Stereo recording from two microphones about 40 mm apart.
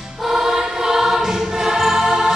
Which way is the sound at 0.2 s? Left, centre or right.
Centre.